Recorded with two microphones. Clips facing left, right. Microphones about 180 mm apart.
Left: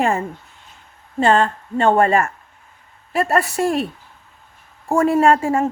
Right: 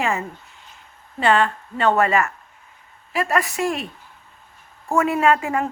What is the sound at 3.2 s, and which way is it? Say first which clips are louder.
Speech: left 3 dB; 35° left (ahead or behind).